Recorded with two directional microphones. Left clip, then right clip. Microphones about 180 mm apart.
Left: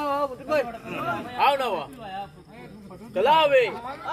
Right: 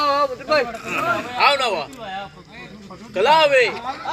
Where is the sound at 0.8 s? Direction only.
5° left (ahead or behind).